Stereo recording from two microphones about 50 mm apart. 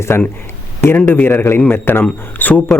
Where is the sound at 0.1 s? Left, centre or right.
Left.